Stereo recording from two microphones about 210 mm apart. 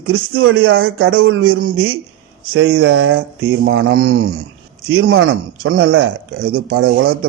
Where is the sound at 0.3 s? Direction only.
75° right (ahead or behind).